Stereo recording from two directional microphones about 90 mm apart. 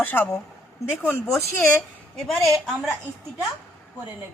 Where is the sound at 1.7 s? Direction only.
5° left (ahead or behind).